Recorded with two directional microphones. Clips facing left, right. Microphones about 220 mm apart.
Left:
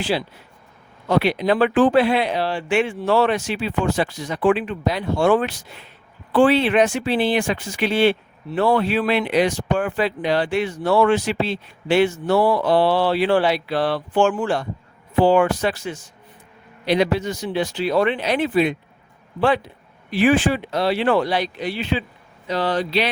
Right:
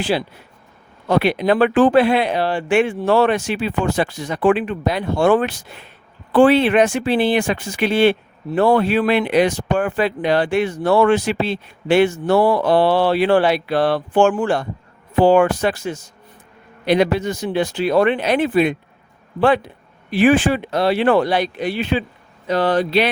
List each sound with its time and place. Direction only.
0.0 s speech: 55° right (ahead or behind)